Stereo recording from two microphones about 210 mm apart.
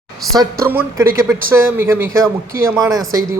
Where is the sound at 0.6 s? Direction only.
10° right (ahead or behind).